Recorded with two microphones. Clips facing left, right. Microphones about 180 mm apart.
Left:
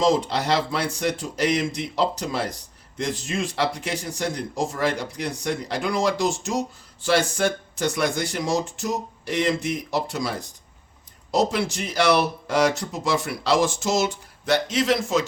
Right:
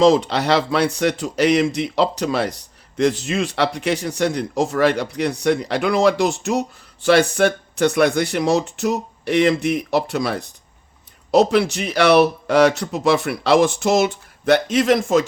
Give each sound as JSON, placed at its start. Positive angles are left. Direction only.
{"t": 0.0, "sound": "speech", "side_deg": -75}